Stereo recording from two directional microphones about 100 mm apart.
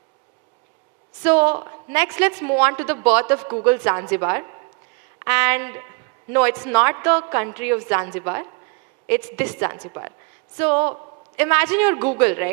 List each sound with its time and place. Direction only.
1.2 s a woman's voice: 25° right (ahead or behind)